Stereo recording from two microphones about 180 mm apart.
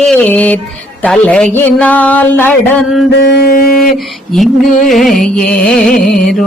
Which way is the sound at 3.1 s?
65° left (ahead or behind).